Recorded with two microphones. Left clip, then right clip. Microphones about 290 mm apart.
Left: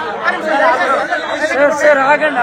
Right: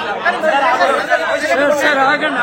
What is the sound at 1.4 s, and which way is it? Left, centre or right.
Speech, centre.